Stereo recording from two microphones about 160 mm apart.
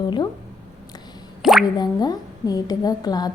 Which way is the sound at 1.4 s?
5° right (ahead or behind).